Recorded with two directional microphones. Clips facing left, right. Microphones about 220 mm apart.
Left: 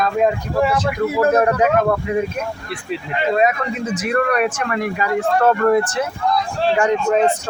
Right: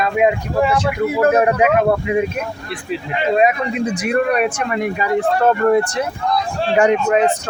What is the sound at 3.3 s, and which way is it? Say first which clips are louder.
Speech: right 3 dB; 15° right (ahead or behind).